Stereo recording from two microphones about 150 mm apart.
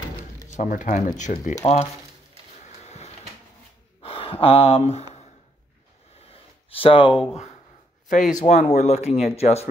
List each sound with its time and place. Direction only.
0.5 s speech: 60° left (ahead or behind)
2.6 s a sound: 45° left (ahead or behind)
4.0 s speech: 40° left (ahead or behind)
6.7 s speech: 35° left (ahead or behind)
8.1 s speech: 60° left (ahead or behind)